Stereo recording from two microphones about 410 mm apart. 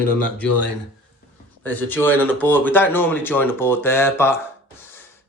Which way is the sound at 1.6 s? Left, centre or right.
Centre.